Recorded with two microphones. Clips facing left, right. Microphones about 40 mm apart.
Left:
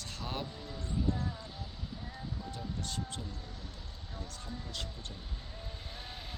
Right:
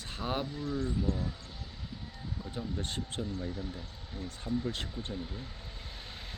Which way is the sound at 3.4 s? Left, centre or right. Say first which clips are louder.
Right 10 dB; centre.